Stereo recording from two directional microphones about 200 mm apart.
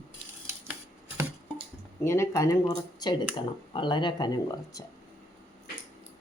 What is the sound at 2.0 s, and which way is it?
Speech, 15° left (ahead or behind).